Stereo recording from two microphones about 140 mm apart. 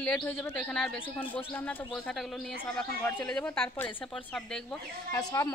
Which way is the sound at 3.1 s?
10° left (ahead or behind).